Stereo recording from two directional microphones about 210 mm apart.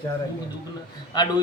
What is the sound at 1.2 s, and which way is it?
Speech, 20° left (ahead or behind).